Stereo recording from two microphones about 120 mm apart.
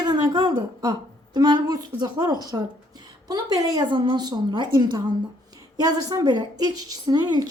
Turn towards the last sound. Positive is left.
turn(degrees=-35)  # may be behind; listen again after turning